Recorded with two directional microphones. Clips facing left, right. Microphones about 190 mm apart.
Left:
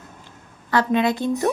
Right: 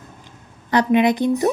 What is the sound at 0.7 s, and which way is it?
Speech, 15° right (ahead or behind).